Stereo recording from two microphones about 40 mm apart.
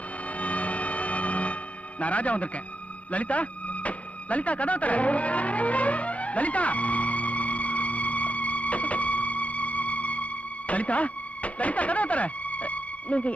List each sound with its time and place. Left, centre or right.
0.4 s music: left
3.1 s vehicle: left
10.7 s a sound: left